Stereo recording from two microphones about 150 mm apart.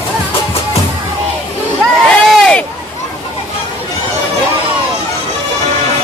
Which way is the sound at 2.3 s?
5° left (ahead or behind).